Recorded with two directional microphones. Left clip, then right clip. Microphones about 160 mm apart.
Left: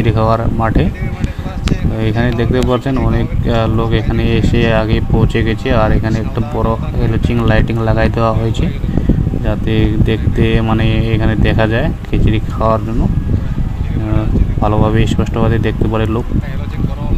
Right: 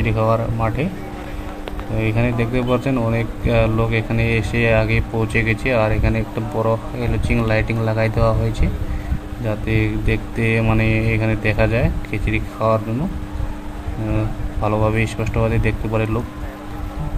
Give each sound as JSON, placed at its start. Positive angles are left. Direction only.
{"t": 0.0, "sound": "speech", "side_deg": 35}
{"t": 2.0, "sound": "speech", "side_deg": 35}
{"t": 14.6, "sound": "speech", "side_deg": 30}